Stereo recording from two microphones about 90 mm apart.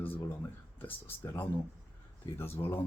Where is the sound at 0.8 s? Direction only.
20° left (ahead or behind).